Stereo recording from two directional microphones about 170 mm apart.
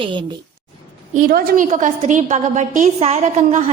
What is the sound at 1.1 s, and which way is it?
A woman's voice, 55° right (ahead or behind).